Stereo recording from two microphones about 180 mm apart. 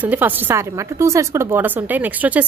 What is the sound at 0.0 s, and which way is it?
Speech, 10° right (ahead or behind).